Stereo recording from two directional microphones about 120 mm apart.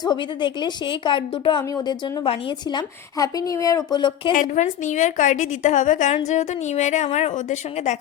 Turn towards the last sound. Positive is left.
turn(degrees=75)  # may be behind; listen again after turning